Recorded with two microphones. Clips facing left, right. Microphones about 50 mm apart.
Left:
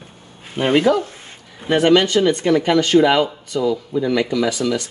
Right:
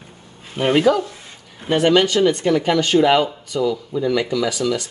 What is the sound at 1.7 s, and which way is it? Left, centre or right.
Speech, left.